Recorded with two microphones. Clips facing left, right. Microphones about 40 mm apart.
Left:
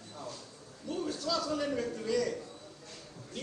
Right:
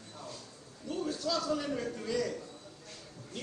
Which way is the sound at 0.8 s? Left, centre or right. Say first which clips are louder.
Even; centre.